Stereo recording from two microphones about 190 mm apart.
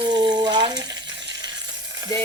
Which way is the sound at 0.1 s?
20° right (ahead or behind).